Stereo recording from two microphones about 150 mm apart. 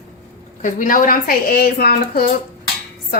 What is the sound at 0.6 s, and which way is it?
Speech, 65° left (ahead or behind).